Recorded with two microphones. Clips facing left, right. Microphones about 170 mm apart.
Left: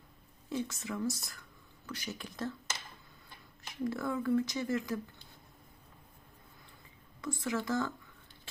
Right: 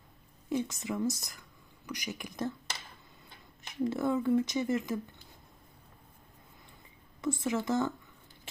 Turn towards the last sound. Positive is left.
turn(degrees=-20)  # may be behind; listen again after turning